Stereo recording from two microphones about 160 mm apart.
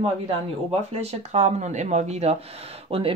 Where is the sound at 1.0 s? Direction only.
45° right (ahead or behind).